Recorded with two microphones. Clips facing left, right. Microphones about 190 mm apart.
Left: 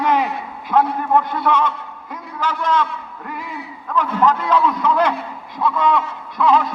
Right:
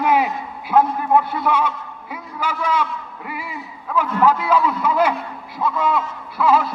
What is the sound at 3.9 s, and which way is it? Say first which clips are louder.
A man's voice: even; 10° right (ahead or behind).